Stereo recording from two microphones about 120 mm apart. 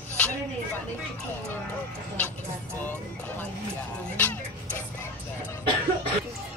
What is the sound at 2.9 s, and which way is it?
Speech, 15° left (ahead or behind).